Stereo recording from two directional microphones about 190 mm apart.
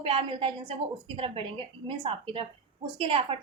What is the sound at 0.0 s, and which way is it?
A woman's voice, 30° right (ahead or behind).